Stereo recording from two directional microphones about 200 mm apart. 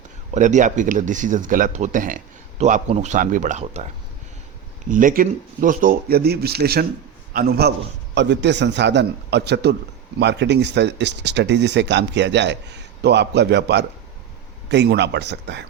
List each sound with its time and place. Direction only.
0.3 s speech: 40° right (ahead or behind)
4.9 s speech: 40° right (ahead or behind)
8.1 s speech: 60° right (ahead or behind)